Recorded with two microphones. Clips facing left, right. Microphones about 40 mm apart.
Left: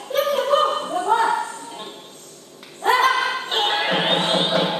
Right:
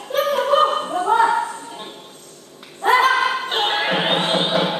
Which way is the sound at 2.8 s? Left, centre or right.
Centre.